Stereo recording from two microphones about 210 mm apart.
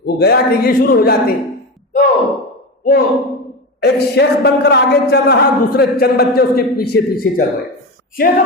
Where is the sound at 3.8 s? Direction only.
50° left (ahead or behind).